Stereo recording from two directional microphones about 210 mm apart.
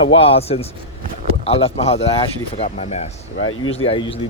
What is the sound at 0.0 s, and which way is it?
A man's voice, 25° left (ahead or behind).